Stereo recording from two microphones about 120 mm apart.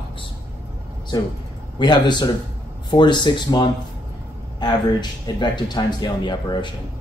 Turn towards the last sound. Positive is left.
turn(degrees=40)  # may be behind; listen again after turning